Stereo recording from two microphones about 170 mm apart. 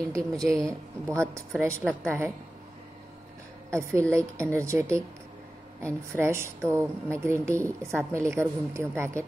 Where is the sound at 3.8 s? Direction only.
15° right (ahead or behind).